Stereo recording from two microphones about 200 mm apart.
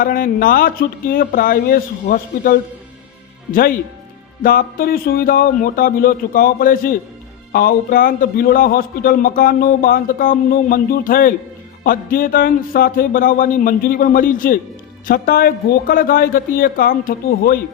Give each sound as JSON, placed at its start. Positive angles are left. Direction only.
{"t": 0.0, "sound": "a man's voice", "side_deg": 45}